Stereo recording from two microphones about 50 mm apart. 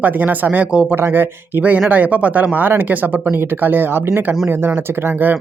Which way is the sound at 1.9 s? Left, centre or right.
Right.